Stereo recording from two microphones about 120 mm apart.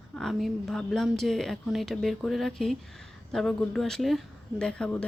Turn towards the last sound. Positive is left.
turn(degrees=10)  # may be behind; listen again after turning